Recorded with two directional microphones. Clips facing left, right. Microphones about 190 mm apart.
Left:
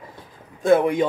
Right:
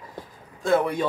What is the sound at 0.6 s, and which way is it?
Speech, 20° left (ahead or behind).